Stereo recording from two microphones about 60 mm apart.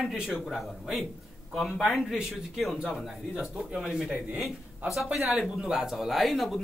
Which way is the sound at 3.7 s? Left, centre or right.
Centre.